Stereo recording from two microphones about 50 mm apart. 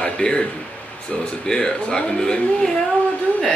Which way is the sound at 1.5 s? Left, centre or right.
Centre.